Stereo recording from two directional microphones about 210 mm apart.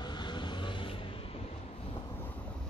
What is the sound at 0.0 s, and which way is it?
Vehicle, 20° left (ahead or behind).